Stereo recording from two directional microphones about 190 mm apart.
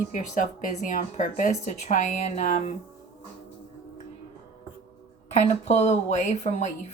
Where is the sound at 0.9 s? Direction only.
45° left (ahead or behind).